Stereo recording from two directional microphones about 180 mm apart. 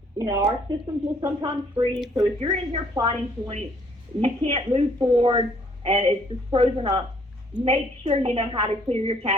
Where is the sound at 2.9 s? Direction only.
25° right (ahead or behind).